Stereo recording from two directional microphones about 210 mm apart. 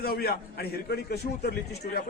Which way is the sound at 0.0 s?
45° left (ahead or behind).